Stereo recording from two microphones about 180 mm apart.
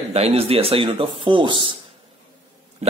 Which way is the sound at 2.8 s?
40° right (ahead or behind).